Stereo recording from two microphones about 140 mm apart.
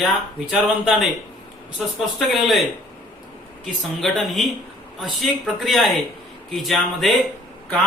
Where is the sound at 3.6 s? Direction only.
Centre (ahead or behind).